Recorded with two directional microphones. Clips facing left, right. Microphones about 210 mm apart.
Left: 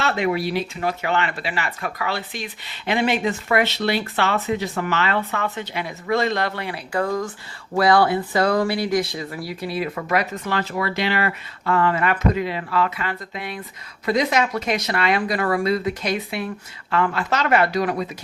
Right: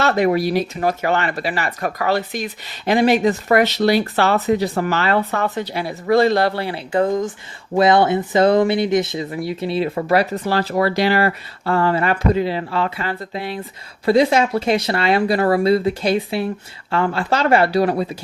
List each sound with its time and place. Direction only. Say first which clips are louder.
0.0 s speech: right 5 dB; 40° right (ahead or behind)